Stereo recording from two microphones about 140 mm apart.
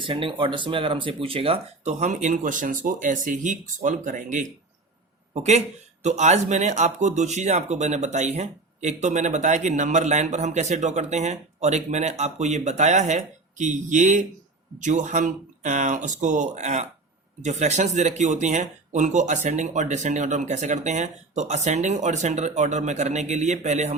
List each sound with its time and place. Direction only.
0.0 s speech: 35° right (ahead or behind); by 4.4 s 65° right (ahead or behind)
5.3 s speech: 55° right (ahead or behind)